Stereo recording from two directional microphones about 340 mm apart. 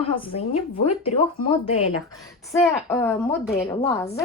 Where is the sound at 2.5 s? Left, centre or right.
Centre.